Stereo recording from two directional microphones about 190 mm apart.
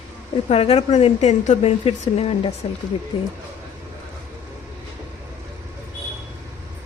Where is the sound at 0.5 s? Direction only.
30° left (ahead or behind).